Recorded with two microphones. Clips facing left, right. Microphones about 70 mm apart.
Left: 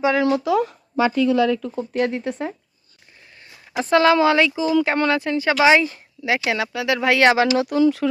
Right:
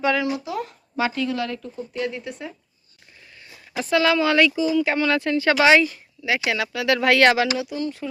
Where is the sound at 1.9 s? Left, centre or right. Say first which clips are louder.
Left 6 dB; left.